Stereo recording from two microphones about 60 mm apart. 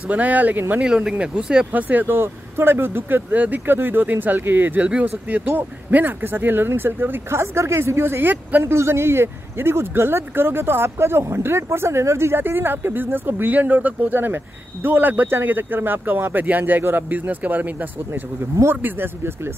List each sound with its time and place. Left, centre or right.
0.1 s speech: right
0.7 s speech: centre
1.7 s speech: right
8.6 s speech: right